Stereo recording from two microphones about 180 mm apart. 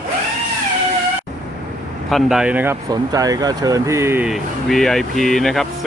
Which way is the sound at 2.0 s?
Centre (ahead or behind).